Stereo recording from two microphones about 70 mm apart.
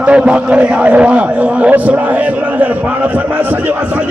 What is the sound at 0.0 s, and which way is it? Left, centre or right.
A man's voice, centre.